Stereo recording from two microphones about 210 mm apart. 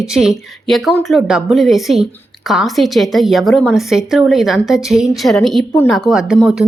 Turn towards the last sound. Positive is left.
turn(degrees=0)  # may be behind; listen again after turning